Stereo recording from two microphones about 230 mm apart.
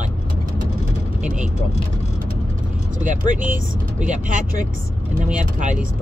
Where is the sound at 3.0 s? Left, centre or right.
Right.